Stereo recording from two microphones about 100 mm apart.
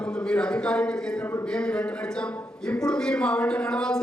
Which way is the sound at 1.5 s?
10° left (ahead or behind).